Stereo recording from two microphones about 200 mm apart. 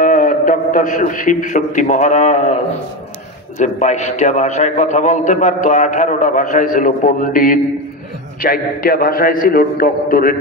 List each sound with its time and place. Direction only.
0.0 s a man's voice: 40° left (ahead or behind)